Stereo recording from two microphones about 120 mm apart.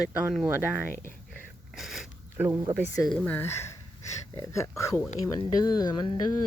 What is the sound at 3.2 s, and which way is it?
Speech, 15° left (ahead or behind).